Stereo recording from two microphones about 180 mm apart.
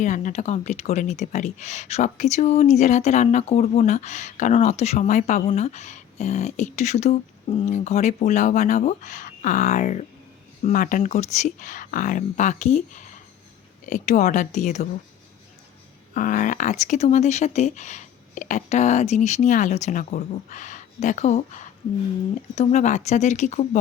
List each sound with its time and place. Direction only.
0.0 s speech: 45° left (ahead or behind)
16.1 s speech: 45° left (ahead or behind)